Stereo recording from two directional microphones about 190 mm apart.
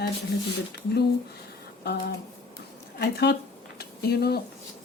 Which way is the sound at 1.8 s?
60° left (ahead or behind).